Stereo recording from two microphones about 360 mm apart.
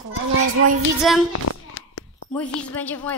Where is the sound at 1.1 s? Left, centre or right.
Centre.